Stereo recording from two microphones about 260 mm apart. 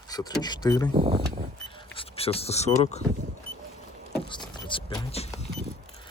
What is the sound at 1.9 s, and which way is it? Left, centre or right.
Speech, left.